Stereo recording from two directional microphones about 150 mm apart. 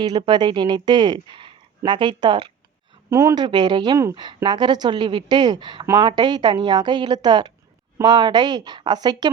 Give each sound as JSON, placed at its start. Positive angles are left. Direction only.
{"t": 0.0, "sound": "speech", "side_deg": -30}
{"t": 3.1, "sound": "speech", "side_deg": -20}